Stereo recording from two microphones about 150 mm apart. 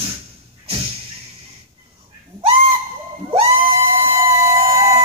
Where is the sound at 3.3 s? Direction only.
40° right (ahead or behind).